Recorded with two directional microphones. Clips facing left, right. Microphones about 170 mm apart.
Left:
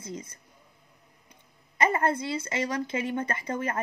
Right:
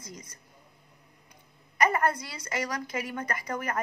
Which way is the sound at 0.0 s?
30° left (ahead or behind).